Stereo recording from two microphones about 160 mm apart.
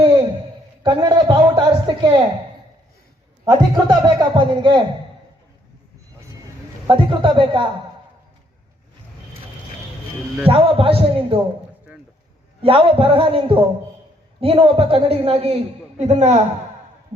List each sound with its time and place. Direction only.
0.8 s a man's voice: 25° right (ahead or behind)
3.4 s a man's voice: 30° right (ahead or behind)
6.8 s a man's voice: 30° right (ahead or behind)
10.5 s a man's voice: 35° right (ahead or behind)
12.6 s a man's voice: 35° right (ahead or behind)